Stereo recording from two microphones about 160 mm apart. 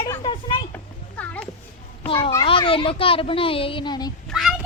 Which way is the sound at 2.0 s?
35° left (ahead or behind).